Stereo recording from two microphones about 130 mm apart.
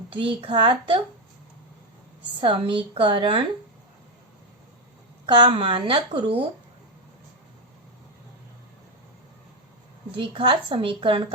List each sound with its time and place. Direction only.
0.1 s a woman's voice: 40° right (ahead or behind)
2.4 s a woman's voice: 40° right (ahead or behind)
5.5 s speech: 45° right (ahead or behind)
10.1 s a woman's voice: 40° right (ahead or behind)